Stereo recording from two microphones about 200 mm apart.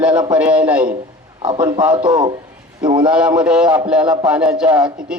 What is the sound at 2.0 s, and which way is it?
Speech, 20° right (ahead or behind).